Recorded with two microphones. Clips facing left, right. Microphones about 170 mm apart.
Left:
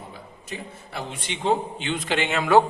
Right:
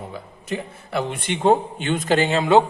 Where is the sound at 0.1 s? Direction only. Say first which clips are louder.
Right 8 dB; 60° right (ahead or behind); by 2.6 s 25° right (ahead or behind).